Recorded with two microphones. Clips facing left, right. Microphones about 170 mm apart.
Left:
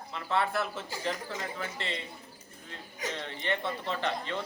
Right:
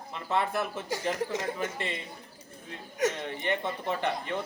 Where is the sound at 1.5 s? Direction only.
15° right (ahead or behind).